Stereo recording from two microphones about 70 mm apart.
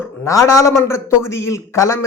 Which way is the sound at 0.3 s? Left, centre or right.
Left.